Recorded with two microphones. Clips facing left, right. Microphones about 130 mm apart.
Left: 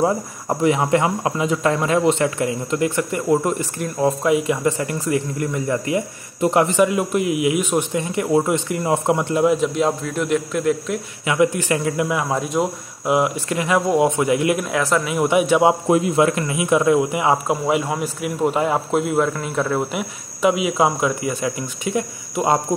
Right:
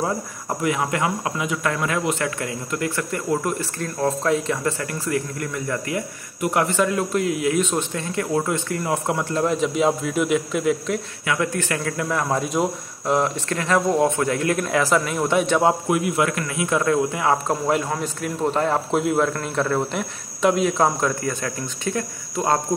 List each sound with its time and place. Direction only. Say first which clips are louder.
0.0 s speech: left 5 dB; 20° left (ahead or behind); by 11.0 s centre (ahead or behind)
11.2 s a man's voice: left 6 dB; 15° left (ahead or behind)
12.2 s a man's voice: left 1 dB; centre (ahead or behind)
14.7 s speech: even; centre (ahead or behind)
15.1 s a man's voice: left 3 dB; 10° left (ahead or behind)
15.9 s speech: left 5 dB; 25° left (ahead or behind)
17.5 s a man's voice: left 2 dB; 5° left (ahead or behind)